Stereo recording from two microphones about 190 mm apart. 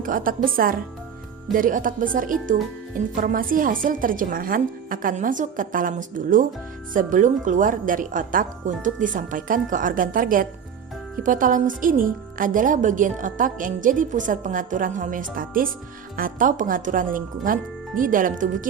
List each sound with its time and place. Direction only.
0.0 s a woman's voice: 45° right (ahead or behind)